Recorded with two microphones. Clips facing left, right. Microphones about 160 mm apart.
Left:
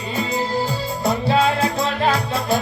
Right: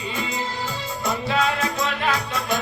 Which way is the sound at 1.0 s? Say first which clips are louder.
Left 5 dB; 30° left (ahead or behind).